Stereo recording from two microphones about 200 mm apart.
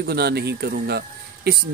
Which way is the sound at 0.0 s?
55° right (ahead or behind).